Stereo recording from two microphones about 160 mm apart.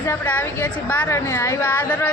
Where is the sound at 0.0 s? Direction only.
15° left (ahead or behind).